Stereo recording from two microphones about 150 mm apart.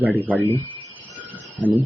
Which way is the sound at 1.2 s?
10° right (ahead or behind).